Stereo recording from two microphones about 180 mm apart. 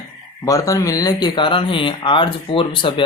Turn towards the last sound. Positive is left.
turn(degrees=25)  # may be behind; listen again after turning